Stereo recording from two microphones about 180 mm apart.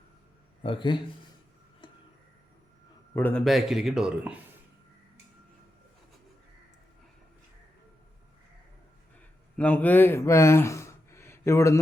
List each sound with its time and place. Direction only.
0.6 s a man's voice: 25° left (ahead or behind)
1.8 s tick-tock: 25° left (ahead or behind)
3.2 s a man's voice: 10° left (ahead or behind)
3.4 s speech: centre (ahead or behind)
9.6 s speech: 10° left (ahead or behind)